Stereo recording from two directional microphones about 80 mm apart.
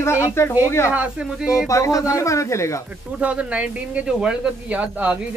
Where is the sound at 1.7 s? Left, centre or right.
Left.